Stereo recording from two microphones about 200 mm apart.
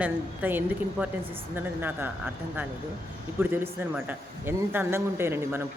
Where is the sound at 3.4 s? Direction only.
10° right (ahead or behind).